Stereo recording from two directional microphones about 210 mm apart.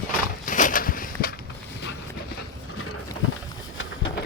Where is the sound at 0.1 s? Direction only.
40° left (ahead or behind).